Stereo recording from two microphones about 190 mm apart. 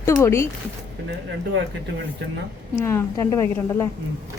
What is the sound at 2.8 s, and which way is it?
A woman's voice, 15° left (ahead or behind).